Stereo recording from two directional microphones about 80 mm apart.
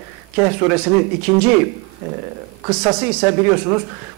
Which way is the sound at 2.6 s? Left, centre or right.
Centre.